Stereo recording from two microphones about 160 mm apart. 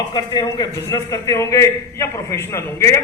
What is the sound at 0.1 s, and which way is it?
A man's voice, 25° left (ahead or behind).